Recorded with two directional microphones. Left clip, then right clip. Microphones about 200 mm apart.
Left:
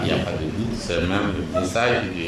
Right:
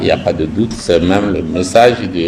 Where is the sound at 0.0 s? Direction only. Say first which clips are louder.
Right 11 dB; 45° right (ahead or behind).